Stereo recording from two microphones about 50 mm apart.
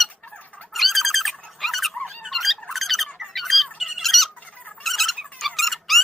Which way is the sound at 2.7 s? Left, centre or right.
Centre.